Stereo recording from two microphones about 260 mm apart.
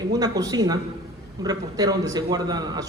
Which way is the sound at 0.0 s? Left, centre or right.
Centre.